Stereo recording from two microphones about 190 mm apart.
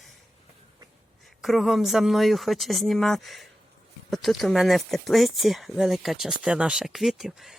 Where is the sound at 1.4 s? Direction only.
Centre (ahead or behind).